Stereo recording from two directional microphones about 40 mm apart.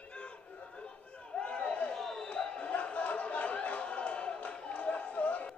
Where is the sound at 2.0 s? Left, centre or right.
Centre.